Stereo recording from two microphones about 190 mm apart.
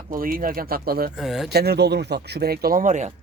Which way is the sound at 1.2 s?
Centre (ahead or behind).